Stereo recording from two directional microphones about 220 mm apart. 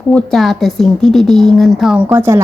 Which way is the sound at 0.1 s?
5° left (ahead or behind).